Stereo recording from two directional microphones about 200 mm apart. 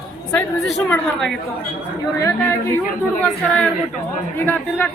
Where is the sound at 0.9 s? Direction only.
Centre (ahead or behind).